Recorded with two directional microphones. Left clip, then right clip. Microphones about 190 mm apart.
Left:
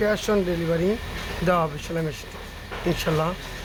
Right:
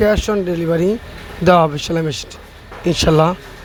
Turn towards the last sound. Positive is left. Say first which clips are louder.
# right 10 dB
turn(degrees=-35)  # may be behind; listen again after turning